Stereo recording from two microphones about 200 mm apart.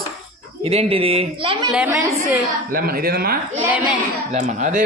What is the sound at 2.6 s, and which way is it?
Speech, 45° right (ahead or behind).